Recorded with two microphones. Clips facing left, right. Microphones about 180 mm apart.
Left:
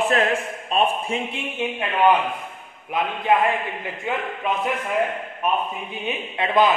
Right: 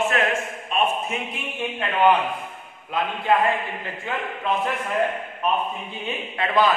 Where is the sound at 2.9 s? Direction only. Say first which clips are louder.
Left 1 dB; 15° left (ahead or behind).